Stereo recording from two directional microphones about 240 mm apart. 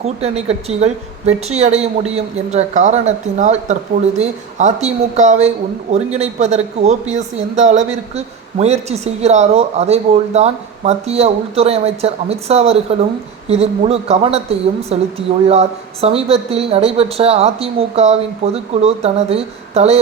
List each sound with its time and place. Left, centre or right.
0.0 s speech: right